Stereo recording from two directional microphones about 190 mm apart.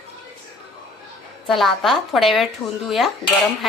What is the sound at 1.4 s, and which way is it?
Speech, centre (ahead or behind).